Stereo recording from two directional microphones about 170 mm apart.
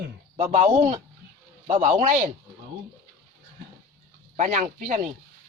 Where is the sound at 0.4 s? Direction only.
45° right (ahead or behind).